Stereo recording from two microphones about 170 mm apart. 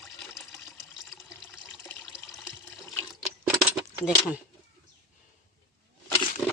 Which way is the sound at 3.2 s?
5° right (ahead or behind).